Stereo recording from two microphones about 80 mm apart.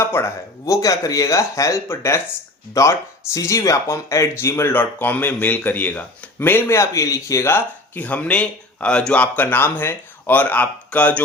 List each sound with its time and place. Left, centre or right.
0.0 s a sound: left
0.6 s speech: left
7.4 s speech: left